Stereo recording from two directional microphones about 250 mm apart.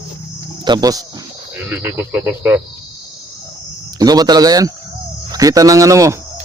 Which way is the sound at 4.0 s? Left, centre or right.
Centre.